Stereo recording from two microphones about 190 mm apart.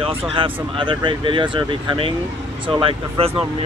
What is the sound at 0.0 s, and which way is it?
Speech, 30° right (ahead or behind).